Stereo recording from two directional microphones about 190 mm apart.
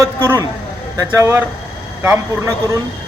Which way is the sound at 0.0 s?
15° right (ahead or behind).